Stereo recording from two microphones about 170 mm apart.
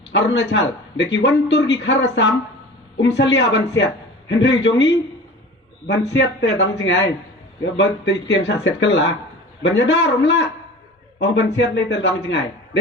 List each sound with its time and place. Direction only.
0.1 s a man's voice: 90° left